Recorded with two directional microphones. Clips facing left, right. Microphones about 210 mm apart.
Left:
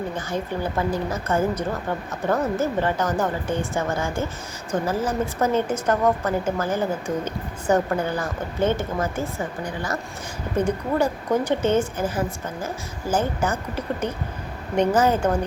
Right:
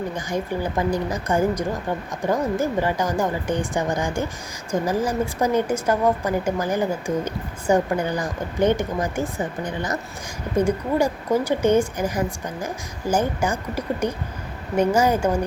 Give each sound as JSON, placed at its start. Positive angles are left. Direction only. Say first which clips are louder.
{"t": 0.3, "sound": "a woman's voice", "louder": "right 3 dB", "side_deg": -15}